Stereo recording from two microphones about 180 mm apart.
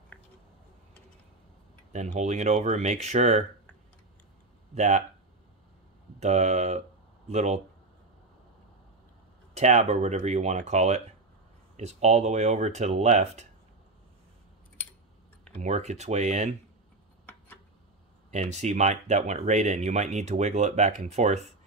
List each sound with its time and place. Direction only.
2.1 s speech: 40° right (ahead or behind)
4.7 s speech: 40° right (ahead or behind)
6.1 s speech: 40° right (ahead or behind)
9.5 s speech: 40° right (ahead or behind)
15.5 s speech: 40° right (ahead or behind)
18.3 s speech: 40° right (ahead or behind)